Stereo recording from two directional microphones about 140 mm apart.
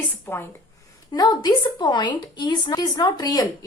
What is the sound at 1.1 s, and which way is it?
A woman's voice, 25° left (ahead or behind).